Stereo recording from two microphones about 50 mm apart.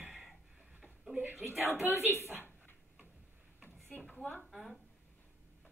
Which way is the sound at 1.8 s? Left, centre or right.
Right.